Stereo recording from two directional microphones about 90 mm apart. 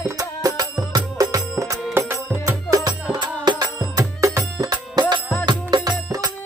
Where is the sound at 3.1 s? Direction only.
60° right (ahead or behind).